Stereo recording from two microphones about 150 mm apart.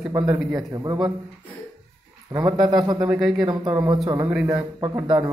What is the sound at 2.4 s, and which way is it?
Speech, 25° right (ahead or behind).